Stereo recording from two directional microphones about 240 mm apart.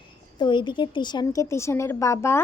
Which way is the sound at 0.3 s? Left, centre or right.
Centre.